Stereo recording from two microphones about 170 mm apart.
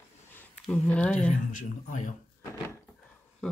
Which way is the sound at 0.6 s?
5° left (ahead or behind).